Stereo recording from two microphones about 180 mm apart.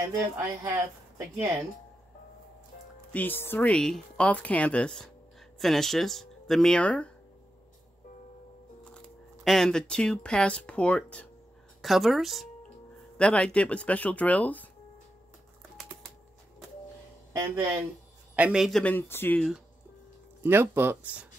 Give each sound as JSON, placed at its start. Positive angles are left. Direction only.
{"t": 0.7, "sound": "speech", "side_deg": -15}
{"t": 3.1, "sound": "speech", "side_deg": 10}
{"t": 8.9, "sound": "speech", "side_deg": 5}
{"t": 15.8, "sound": "typing", "side_deg": 0}
{"t": 17.3, "sound": "speech", "side_deg": -15}
{"t": 18.3, "sound": "speech", "side_deg": -5}
{"t": 20.4, "sound": "speech", "side_deg": -15}